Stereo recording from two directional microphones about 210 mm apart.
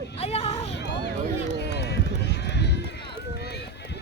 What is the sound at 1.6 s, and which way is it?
Basketball bounce, 55° left (ahead or behind).